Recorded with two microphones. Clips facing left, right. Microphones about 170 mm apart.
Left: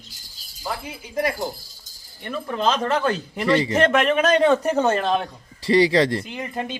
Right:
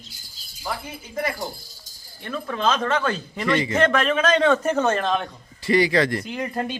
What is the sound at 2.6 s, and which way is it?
Speech, 35° left (ahead or behind).